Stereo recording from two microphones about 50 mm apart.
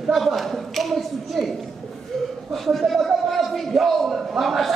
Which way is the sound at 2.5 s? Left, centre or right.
Centre.